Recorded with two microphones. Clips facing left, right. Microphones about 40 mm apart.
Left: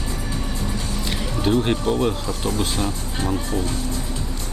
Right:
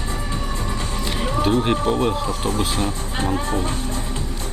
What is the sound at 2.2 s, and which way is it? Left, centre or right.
Speech, right.